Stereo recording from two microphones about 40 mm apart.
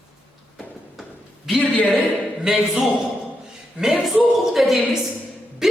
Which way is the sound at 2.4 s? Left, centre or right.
Centre.